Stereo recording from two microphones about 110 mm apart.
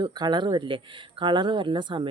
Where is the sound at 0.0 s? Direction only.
40° right (ahead or behind).